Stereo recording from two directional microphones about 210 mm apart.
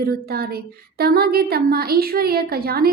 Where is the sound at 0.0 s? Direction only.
45° right (ahead or behind).